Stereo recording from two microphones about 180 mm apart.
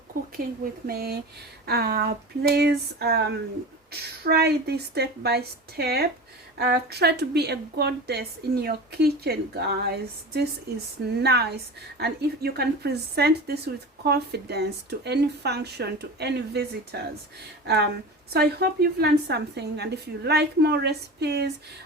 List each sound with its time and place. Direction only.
0.1 s a woman's voice: 55° right (ahead or behind)
18.3 s a woman's voice: 60° right (ahead or behind)